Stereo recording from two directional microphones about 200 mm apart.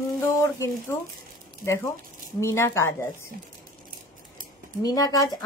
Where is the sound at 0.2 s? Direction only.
15° left (ahead or behind).